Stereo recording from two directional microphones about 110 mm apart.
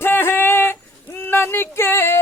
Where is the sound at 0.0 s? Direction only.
20° left (ahead or behind).